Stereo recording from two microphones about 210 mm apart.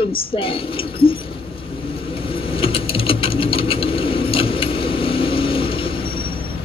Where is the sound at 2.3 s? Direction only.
25° left (ahead or behind).